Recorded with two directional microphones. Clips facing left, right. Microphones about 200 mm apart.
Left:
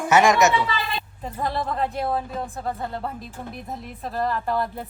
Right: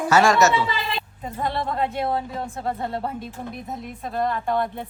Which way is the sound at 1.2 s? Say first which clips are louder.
Even; centre (ahead or behind).